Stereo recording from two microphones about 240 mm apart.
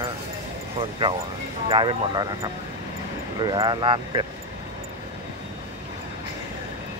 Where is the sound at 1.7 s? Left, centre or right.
Centre.